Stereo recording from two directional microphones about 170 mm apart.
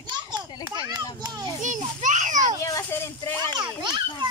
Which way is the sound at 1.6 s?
45° right (ahead or behind).